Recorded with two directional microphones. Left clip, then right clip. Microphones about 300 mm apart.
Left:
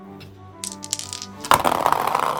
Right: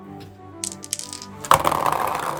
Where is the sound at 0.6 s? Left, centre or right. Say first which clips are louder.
Left 1 dB; centre.